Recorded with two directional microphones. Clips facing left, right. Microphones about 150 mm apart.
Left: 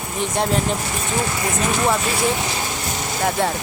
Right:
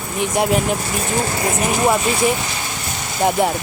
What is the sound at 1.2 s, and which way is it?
Speech, 35° right (ahead or behind).